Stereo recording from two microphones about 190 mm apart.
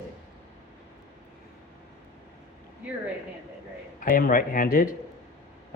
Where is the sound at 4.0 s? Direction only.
45° left (ahead or behind).